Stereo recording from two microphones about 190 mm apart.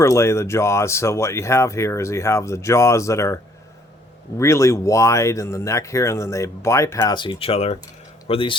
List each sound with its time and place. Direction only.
0.0 s a man's voice: 15° left (ahead or behind)